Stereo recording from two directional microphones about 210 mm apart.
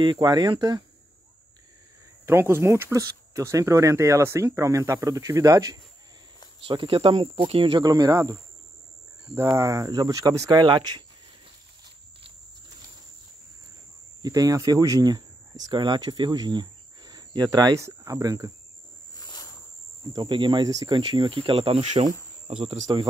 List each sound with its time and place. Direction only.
0.0 s speech: 20° right (ahead or behind)
2.2 s speech: 10° right (ahead or behind)
14.2 s speech: 15° right (ahead or behind)
19.1 s a sound: 20° left (ahead or behind)
20.0 s speech: 20° right (ahead or behind)